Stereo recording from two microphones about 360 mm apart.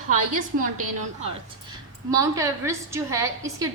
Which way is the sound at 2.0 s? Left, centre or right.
Centre.